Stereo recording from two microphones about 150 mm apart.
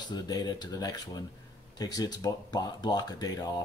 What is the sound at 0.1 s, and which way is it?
Speech, 25° left (ahead or behind).